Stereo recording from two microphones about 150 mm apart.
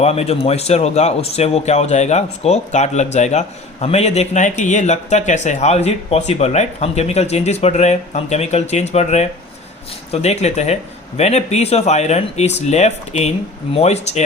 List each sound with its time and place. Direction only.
0.0 s a man's voice: 45° left (ahead or behind)